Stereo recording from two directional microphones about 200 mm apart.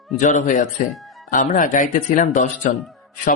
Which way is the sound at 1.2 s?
40° left (ahead or behind).